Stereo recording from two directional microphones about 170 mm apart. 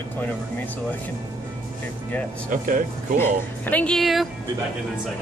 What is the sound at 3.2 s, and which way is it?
Speech, 10° left (ahead or behind).